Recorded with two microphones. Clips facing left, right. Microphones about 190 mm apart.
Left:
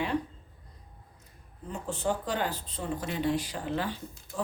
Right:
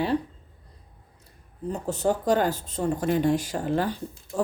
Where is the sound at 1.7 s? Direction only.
40° right (ahead or behind).